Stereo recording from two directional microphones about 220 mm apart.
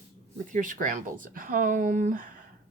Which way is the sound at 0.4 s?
35° right (ahead or behind).